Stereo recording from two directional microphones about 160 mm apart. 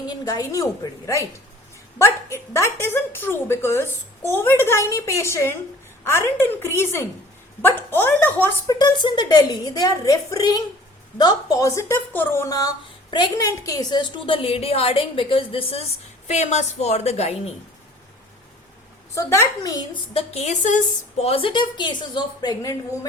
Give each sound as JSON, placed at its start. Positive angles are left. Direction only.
{"t": 0.0, "sound": "a woman's voice", "side_deg": 25}
{"t": 8.8, "sound": "a woman's voice", "side_deg": 25}
{"t": 19.1, "sound": "a woman's voice", "side_deg": 20}
{"t": 20.3, "sound": "a woman's voice", "side_deg": 45}